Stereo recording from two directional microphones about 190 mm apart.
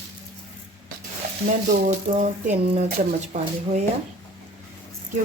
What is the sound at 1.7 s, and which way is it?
Speech, 40° right (ahead or behind).